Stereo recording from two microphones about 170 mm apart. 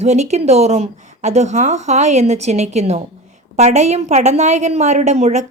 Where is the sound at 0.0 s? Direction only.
40° right (ahead or behind).